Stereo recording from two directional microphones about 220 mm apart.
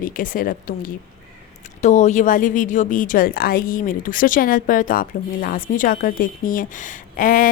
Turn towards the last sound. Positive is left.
turn(degrees=40)  # may be behind; listen again after turning